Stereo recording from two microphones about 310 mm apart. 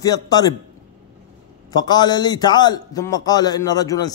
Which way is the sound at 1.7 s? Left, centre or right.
Centre.